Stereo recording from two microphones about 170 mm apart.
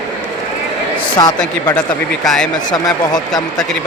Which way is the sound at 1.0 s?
25° left (ahead or behind).